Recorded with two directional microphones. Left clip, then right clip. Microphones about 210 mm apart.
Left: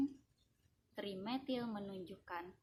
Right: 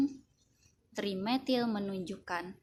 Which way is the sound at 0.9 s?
25° right (ahead or behind).